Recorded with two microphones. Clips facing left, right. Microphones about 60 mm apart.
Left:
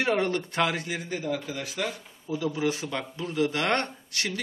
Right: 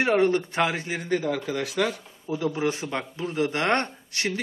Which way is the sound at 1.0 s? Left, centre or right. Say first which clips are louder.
Right 7 dB; right.